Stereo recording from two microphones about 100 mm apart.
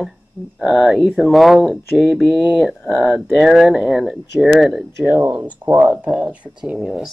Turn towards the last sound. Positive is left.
turn(degrees=-5)  # may be behind; listen again after turning